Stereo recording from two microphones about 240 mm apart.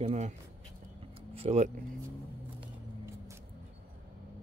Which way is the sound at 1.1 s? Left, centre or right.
Right.